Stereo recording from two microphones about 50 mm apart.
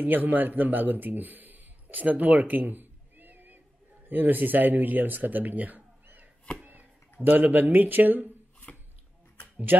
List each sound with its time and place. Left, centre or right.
0.0 s speech: right